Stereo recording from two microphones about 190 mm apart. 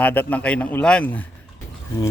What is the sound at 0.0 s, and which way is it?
A man's voice, 10° left (ahead or behind).